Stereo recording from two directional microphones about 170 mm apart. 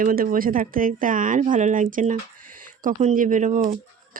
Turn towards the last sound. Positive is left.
turn(degrees=-45)  # may be behind; listen again after turning